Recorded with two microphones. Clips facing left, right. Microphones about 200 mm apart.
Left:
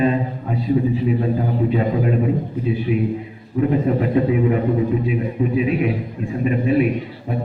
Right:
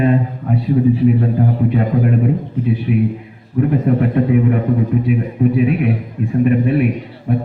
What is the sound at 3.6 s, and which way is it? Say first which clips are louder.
A man's voice: right 3 dB; 55° right (ahead or behind).